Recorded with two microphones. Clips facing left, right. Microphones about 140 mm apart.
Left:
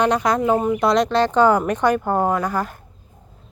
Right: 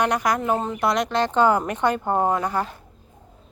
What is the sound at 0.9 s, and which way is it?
Speech, 20° right (ahead or behind).